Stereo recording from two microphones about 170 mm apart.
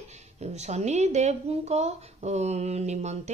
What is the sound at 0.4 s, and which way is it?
Speech, 40° right (ahead or behind).